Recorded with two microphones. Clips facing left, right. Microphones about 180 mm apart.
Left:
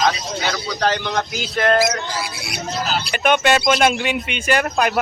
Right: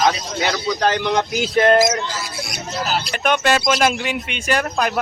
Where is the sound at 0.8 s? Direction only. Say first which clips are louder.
Right 1 dB; 15° right (ahead or behind).